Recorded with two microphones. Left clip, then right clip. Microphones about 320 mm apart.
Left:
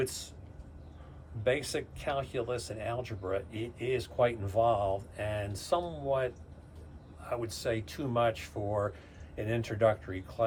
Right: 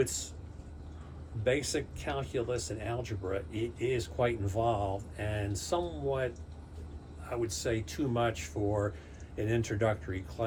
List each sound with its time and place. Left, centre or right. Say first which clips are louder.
0.0 s speech: right 2 dB; centre
1.5 s speech: even; centre